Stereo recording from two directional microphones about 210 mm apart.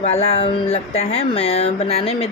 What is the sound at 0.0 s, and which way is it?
Speech, 30° left (ahead or behind).